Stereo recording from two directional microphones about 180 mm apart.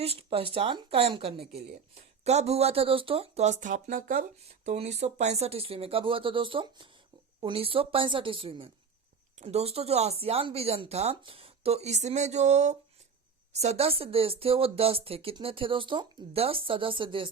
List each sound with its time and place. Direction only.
0.0 s speech: 35° right (ahead or behind); by 4.2 s 50° right (ahead or behind)
4.6 s a woman's voice: 40° right (ahead or behind)